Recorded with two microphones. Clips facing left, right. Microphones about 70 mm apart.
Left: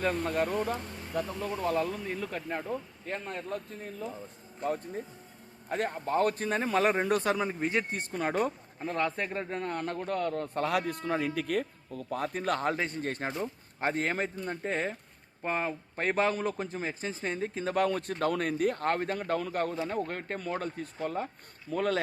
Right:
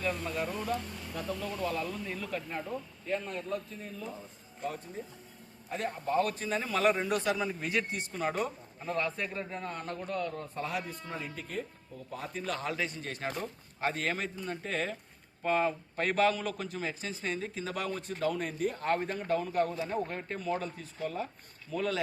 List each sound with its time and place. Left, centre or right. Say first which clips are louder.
0.0 s a man's voice: left 5 dB; left
1.3 s speech: even; left
5.6 s a man's voice: left 2 dB; left
7.6 s a man's voice: left 3 dB; left
7.9 s a man's voice: left 3 dB; left
12.1 s a man's voice: left 6 dB; left